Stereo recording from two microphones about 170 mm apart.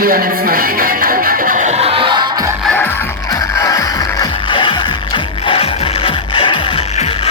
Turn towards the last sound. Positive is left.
turn(degrees=35)  # may be behind; listen again after turning